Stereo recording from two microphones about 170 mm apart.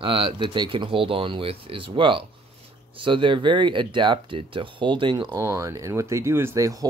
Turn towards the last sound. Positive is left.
turn(degrees=-20)  # may be behind; listen again after turning